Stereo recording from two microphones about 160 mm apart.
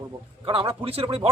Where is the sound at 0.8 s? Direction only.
35° right (ahead or behind).